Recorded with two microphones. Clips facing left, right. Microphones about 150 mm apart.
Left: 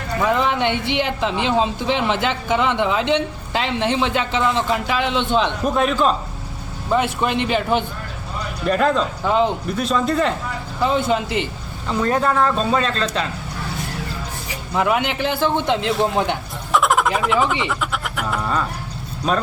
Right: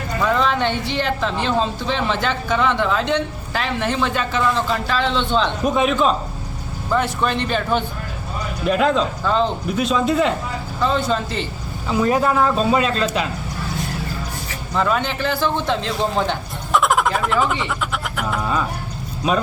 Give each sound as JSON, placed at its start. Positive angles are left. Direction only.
{"t": 0.2, "sound": "speech", "side_deg": 15}
{"t": 5.5, "sound": "speech", "side_deg": -5}
{"t": 6.9, "sound": "speech", "side_deg": 15}
{"t": 8.6, "sound": "speech", "side_deg": -5}
{"t": 9.2, "sound": "speech", "side_deg": 15}
{"t": 9.7, "sound": "speech", "side_deg": -5}
{"t": 10.8, "sound": "speech", "side_deg": 20}
{"t": 11.9, "sound": "speech", "side_deg": -10}
{"t": 14.7, "sound": "speech", "side_deg": 15}
{"t": 16.7, "sound": "fowl", "side_deg": 0}
{"t": 17.7, "sound": "speech", "side_deg": 0}